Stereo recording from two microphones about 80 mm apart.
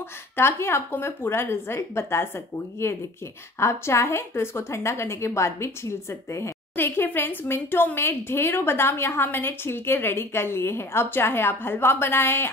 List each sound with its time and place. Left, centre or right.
0.4 s a woman's voice: left